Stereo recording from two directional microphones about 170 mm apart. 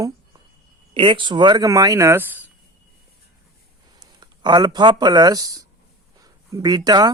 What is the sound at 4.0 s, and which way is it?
Speech, 25° right (ahead or behind).